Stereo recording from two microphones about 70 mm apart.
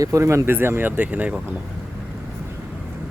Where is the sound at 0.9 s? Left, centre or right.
Centre.